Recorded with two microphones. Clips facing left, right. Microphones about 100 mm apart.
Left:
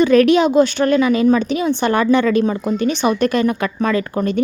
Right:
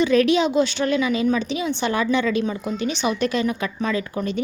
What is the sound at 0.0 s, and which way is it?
A woman's voice, 55° left (ahead or behind).